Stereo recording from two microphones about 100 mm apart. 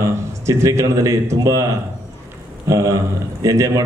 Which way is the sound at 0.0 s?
30° right (ahead or behind).